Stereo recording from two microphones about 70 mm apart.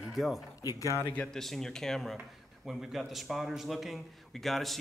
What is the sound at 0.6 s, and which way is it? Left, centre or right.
Speech, left.